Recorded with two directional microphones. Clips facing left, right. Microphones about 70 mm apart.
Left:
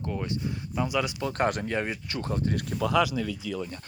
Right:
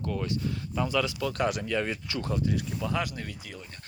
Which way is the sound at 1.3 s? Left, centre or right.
Left.